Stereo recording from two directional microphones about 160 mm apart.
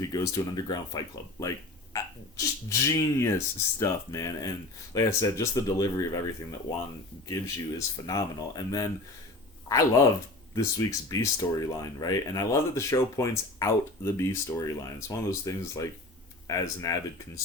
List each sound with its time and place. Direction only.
0.0 s speech: 20° left (ahead or behind)
8.0 s speech: 25° left (ahead or behind)